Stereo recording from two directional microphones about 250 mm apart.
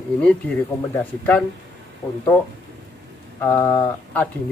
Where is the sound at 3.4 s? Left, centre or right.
Centre.